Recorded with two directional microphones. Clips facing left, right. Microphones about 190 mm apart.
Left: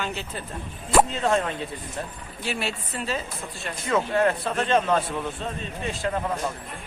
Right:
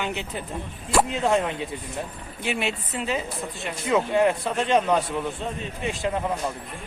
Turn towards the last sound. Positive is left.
turn(degrees=-15)  # may be behind; listen again after turning